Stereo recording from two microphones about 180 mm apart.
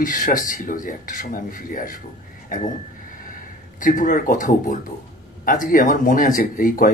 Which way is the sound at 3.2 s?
50° left (ahead or behind).